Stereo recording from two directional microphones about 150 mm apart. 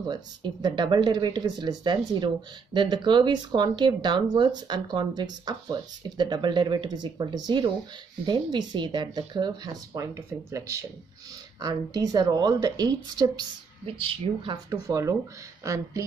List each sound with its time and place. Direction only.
0.1 s speech: 30° right (ahead or behind)
14.7 s speech: 25° right (ahead or behind)